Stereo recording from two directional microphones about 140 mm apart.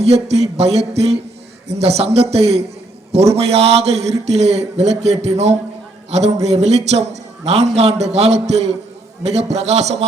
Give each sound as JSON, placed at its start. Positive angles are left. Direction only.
{"t": 0.0, "sound": "a man's voice", "side_deg": -50}